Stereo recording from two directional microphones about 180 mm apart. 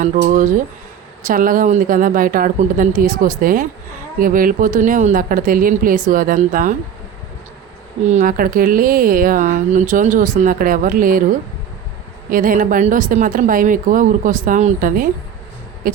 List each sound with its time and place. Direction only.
0.0 s speech: 45° right (ahead or behind)
8.0 s speech: 45° right (ahead or behind)
12.3 s speech: 50° right (ahead or behind)